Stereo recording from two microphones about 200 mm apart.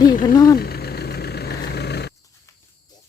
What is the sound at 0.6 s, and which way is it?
Vehicle, 50° left (ahead or behind).